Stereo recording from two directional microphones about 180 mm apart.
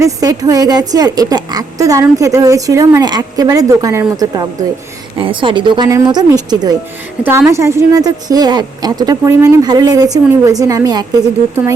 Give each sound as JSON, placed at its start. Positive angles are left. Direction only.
{"t": 0.0, "sound": "a woman's voice", "side_deg": -20}